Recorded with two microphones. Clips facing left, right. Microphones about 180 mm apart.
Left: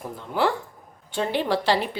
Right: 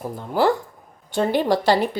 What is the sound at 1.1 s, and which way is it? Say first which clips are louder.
Speech: right 5 dB; 45° right (ahead or behind).